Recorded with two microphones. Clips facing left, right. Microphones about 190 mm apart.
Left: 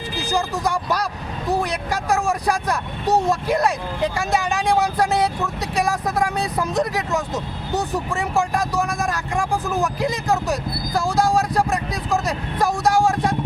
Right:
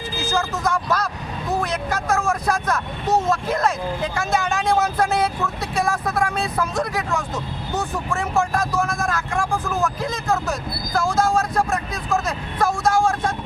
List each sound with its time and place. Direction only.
0.2 s speech: 15° left (ahead or behind)